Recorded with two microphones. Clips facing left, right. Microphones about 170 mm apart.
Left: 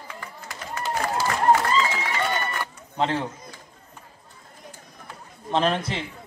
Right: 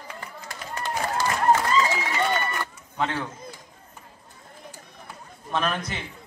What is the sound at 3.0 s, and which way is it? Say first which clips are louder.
Speech: left 3 dB; 30° left (ahead or behind).